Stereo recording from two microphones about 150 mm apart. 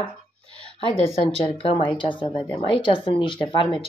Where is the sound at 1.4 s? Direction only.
40° left (ahead or behind).